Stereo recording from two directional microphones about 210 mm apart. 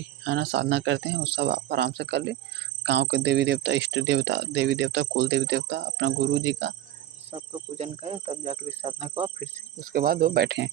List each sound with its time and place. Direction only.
0.3 s speech: 55° right (ahead or behind)
7.8 s speech: 30° right (ahead or behind); by 10.7 s 50° right (ahead or behind)